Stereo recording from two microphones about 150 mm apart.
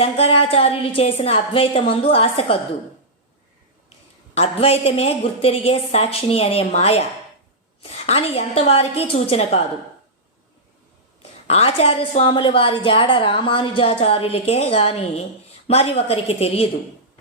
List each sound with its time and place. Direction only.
0.0 s a woman's voice: 40° left (ahead or behind)
4.4 s a woman's voice: 40° left (ahead or behind)
11.2 s a woman's voice: 45° left (ahead or behind)